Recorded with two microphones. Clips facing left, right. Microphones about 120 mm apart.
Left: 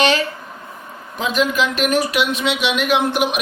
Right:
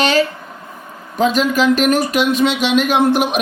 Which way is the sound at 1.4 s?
40° right (ahead or behind).